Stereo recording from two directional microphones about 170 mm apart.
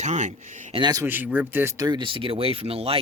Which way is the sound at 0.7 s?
25° right (ahead or behind).